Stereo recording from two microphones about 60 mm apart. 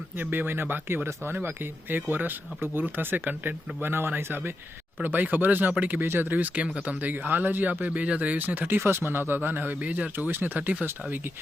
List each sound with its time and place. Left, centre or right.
0.2 s speech: right